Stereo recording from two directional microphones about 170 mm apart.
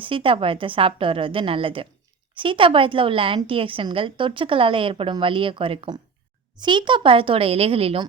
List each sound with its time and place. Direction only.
0.0 s a woman's voice: 30° right (ahead or behind)